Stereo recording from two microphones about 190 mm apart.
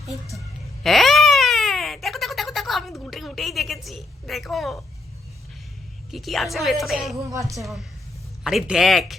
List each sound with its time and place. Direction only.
0.3 s baby cry: centre (ahead or behind)
3.0 s a sound: centre (ahead or behind)
6.1 s speech: centre (ahead or behind)
7.3 s a woman's voice: 15° right (ahead or behind)
7.6 s speech: centre (ahead or behind)